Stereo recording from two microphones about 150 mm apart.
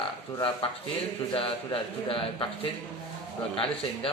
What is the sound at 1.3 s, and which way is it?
A man's voice, 35° left (ahead or behind).